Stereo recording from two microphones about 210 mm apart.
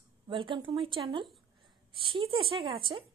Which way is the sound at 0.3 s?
25° right (ahead or behind).